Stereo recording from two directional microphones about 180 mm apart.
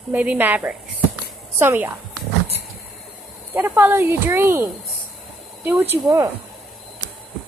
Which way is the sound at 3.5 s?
10° right (ahead or behind).